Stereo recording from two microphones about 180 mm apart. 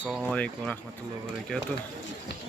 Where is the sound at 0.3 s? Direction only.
5° left (ahead or behind).